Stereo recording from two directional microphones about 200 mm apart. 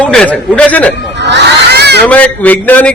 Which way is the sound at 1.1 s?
60° right (ahead or behind).